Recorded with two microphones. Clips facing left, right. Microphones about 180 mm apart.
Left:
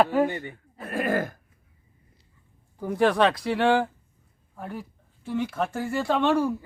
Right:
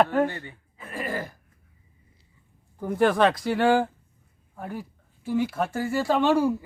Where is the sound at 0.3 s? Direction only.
15° left (ahead or behind).